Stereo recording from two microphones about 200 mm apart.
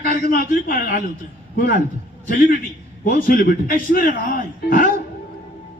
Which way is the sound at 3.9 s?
45° left (ahead or behind).